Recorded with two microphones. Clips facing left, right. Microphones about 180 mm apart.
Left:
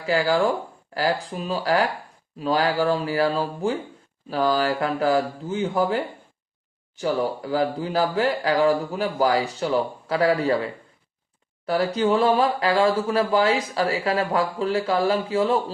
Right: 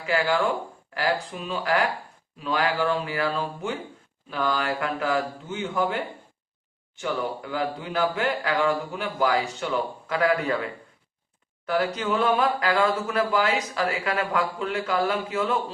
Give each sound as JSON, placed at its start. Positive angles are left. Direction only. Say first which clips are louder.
{"t": 0.0, "sound": "speech", "louder": "left 3 dB", "side_deg": 35}